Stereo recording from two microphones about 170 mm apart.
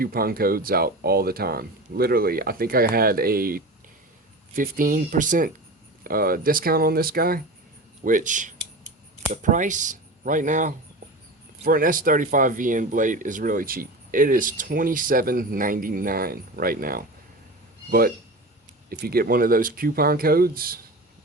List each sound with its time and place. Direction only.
0.0 s speech: 60° right (ahead or behind)
8.0 s speech: 50° right (ahead or behind)
18.9 s speech: 60° right (ahead or behind)